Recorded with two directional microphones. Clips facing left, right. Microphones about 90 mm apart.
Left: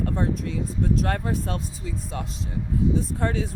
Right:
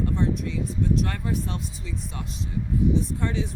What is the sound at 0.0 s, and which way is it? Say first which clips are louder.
Speech: even; 45° left (ahead or behind).